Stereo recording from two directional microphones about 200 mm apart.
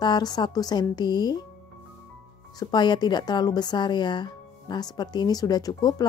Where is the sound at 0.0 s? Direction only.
20° left (ahead or behind).